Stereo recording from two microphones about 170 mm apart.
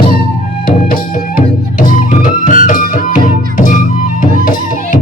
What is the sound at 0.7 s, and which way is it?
Music, 55° left (ahead or behind).